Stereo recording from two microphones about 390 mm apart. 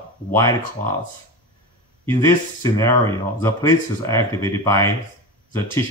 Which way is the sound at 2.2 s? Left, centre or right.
Centre.